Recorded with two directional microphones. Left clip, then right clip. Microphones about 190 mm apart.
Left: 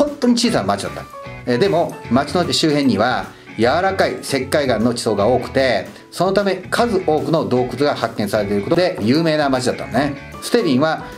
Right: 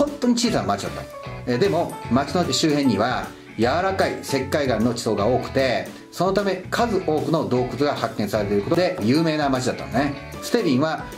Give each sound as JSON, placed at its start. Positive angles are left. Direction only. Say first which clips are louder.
{"t": 0.0, "sound": "speech", "louder": "left 5 dB", "side_deg": 20}